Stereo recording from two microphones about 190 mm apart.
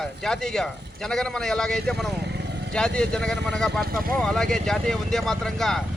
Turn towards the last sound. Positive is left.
turn(degrees=0)  # may be behind; listen again after turning